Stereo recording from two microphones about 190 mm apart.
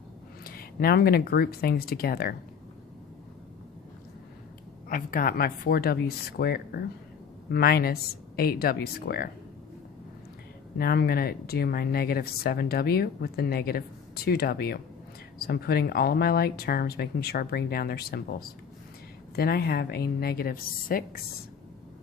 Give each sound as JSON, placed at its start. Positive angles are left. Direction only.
{"t": 0.4, "sound": "speech", "side_deg": 50}
{"t": 4.9, "sound": "speech", "side_deg": 45}
{"t": 10.8, "sound": "speech", "side_deg": 55}